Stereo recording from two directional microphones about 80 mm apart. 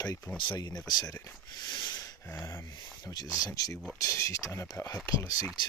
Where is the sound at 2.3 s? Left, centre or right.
Left.